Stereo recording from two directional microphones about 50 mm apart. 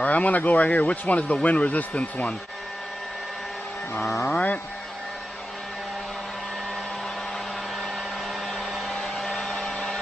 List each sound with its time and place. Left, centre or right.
0.0 s speech: left
4.3 s speech: left
8.5 s hair dryer: centre